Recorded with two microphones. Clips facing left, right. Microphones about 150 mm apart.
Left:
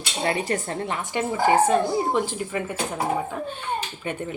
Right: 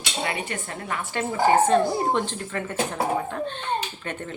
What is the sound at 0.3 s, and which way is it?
Speech, 35° left (ahead or behind).